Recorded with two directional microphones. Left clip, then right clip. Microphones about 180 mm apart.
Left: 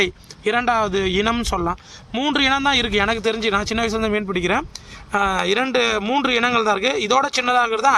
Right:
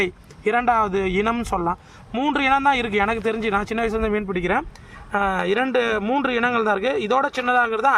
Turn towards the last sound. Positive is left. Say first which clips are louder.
# left 2 dB
turn(degrees=30)  # may be behind; listen again after turning